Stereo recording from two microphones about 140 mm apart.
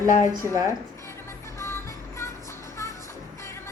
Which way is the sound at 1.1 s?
20° left (ahead or behind).